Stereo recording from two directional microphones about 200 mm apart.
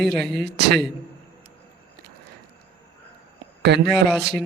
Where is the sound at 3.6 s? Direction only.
55° right (ahead or behind).